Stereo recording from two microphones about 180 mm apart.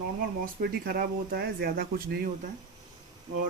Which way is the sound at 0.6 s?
55° right (ahead or behind).